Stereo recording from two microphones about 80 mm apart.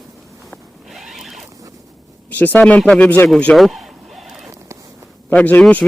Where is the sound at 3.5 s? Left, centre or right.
Centre.